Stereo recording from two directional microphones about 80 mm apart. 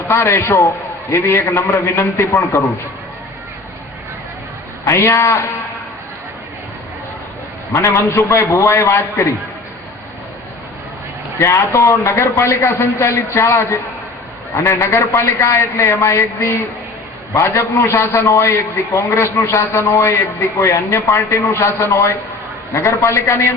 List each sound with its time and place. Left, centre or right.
0.1 s a man's voice: left
4.9 s a man's voice: left
7.7 s a man's voice: left
11.3 s a man's voice: left
17.3 s a man's voice: left
22.7 s a man's voice: left